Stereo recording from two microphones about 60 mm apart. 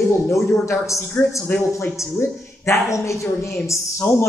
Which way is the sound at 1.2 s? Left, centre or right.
Left.